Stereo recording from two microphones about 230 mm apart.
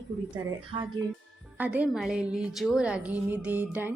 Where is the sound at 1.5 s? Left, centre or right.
Centre.